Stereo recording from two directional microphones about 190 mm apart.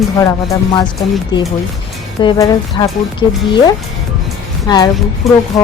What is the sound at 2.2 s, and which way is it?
Speech, 20° left (ahead or behind).